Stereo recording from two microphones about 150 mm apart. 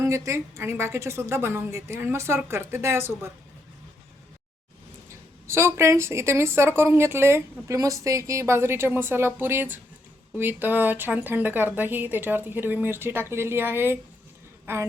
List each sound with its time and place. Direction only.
0.0 s a woman's voice: 20° right (ahead or behind)
5.0 s a woman's voice: 20° right (ahead or behind)